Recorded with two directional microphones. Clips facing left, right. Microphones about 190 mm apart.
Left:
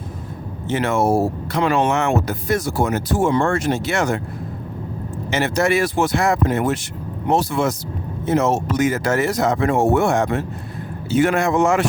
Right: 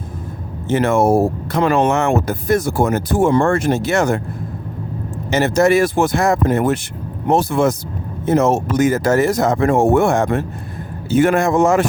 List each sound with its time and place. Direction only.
0.7 s speech: 50° right (ahead or behind)
5.3 s speech: 45° right (ahead or behind)